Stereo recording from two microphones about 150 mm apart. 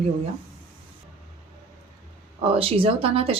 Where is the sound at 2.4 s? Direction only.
40° right (ahead or behind).